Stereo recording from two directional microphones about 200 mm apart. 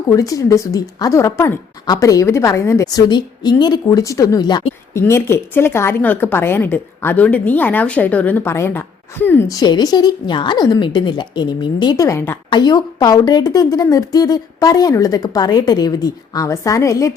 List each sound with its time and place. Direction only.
0.1 s a woman's voice: 15° left (ahead or behind)